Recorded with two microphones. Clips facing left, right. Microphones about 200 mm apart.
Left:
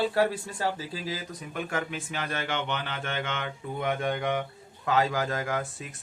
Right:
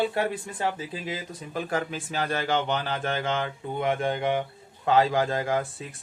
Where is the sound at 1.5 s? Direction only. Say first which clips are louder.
Right 3 dB; 35° right (ahead or behind).